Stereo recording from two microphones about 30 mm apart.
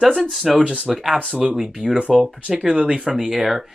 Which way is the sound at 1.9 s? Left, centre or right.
Right.